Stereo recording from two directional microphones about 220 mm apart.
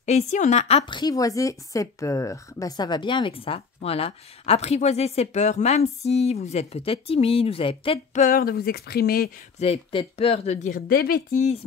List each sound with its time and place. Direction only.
0.0 s a woman's voice: 30° left (ahead or behind)
9.6 s a woman's voice: 25° left (ahead or behind); by 11.1 s 45° left (ahead or behind)